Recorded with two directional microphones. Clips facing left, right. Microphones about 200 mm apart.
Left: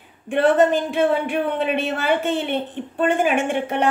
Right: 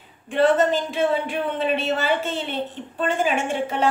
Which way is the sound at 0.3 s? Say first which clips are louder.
Left 2 dB; 60° left (ahead or behind).